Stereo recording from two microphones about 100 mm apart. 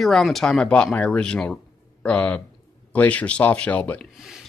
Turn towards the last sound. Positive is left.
turn(degrees=15)  # may be behind; listen again after turning